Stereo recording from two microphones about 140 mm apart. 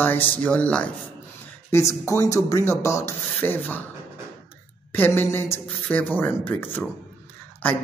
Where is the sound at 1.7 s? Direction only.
20° left (ahead or behind).